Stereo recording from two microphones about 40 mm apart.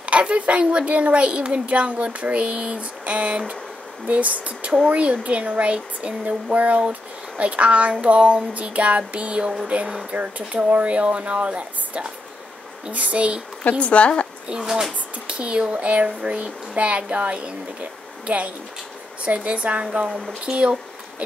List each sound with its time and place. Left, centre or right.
0.0 s a child's voice: right
13.8 s speech: left
14.6 s speech: centre
15.2 s a child's voice: right